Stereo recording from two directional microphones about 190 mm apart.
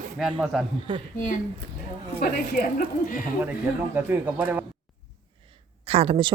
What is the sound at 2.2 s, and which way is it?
A woman's voice, 50° left (ahead or behind).